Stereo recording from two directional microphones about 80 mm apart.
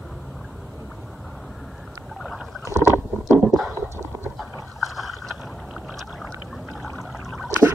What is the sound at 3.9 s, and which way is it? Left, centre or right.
Horse, right.